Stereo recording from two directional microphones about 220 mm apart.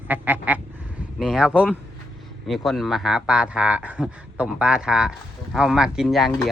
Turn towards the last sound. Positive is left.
turn(degrees=0)  # may be behind; listen again after turning